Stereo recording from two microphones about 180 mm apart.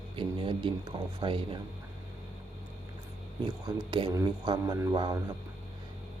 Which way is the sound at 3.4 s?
25° right (ahead or behind).